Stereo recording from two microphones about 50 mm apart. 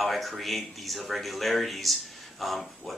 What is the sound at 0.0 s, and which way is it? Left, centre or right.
Speech, centre.